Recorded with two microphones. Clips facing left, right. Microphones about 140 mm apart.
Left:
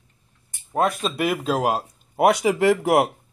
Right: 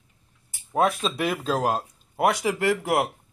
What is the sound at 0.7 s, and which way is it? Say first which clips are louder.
Speech: left 1 dB; centre (ahead or behind).